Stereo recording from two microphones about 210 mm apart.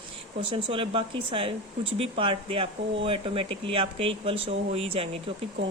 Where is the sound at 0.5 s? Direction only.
25° right (ahead or behind).